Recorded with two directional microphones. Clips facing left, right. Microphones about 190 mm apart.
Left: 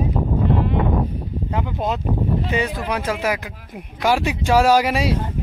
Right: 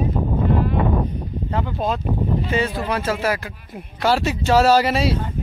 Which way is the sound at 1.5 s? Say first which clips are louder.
Right 1 dB; 15° left (ahead or behind).